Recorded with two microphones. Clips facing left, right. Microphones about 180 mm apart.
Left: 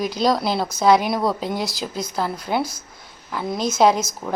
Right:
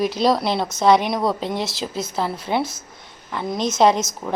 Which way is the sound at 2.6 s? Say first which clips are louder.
Even; 25° right (ahead or behind).